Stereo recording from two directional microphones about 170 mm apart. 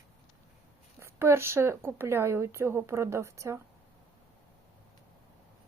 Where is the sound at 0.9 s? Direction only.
15° right (ahead or behind).